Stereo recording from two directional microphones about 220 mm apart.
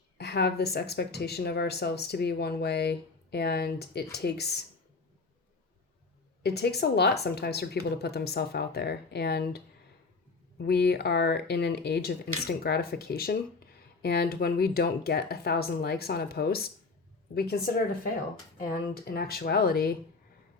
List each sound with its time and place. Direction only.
0.2 s speech: 50° left (ahead or behind)
6.4 s speech: 50° left (ahead or behind)
10.6 s speech: 50° left (ahead or behind)
18.6 s speech: 45° left (ahead or behind)